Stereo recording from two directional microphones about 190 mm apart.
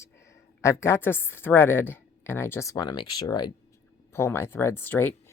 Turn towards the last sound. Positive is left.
turn(degrees=10)  # may be behind; listen again after turning